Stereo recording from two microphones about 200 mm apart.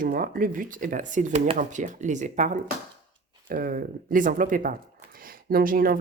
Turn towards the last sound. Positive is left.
turn(degrees=-45)  # may be behind; listen again after turning